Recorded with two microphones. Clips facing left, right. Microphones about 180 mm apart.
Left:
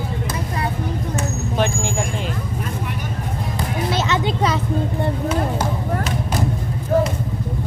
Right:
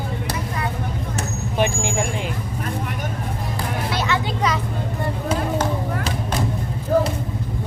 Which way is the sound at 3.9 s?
20° left (ahead or behind).